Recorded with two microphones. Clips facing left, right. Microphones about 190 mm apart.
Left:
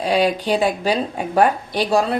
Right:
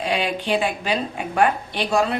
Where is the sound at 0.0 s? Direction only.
40° left (ahead or behind).